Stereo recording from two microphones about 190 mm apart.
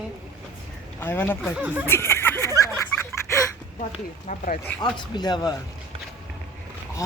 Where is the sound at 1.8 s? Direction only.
10° left (ahead or behind).